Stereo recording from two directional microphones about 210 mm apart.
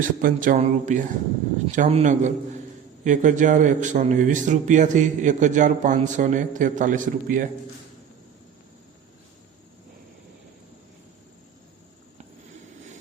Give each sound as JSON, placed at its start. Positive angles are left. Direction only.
{"t": 0.0, "sound": "a man's voice", "side_deg": -40}